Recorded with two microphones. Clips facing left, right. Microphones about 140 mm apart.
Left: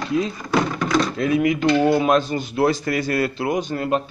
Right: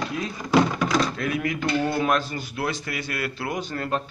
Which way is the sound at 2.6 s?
40° left (ahead or behind).